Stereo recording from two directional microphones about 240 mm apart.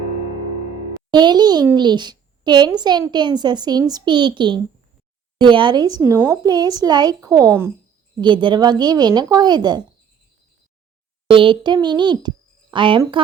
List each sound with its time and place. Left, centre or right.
1.1 s a child's voice: centre
11.3 s speech: right